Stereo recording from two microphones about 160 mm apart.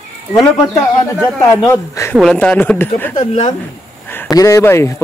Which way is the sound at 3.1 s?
45° left (ahead or behind).